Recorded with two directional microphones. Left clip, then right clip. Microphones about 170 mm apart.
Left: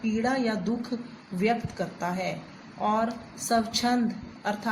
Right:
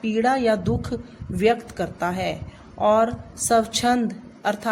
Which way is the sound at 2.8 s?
65° right (ahead or behind).